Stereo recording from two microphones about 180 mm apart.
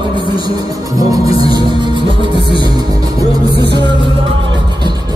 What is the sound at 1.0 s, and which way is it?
Music, 20° right (ahead or behind).